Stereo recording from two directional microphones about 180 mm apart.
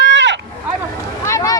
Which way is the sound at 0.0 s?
80° right.